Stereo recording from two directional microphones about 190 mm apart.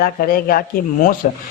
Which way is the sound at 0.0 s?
50° left (ahead or behind).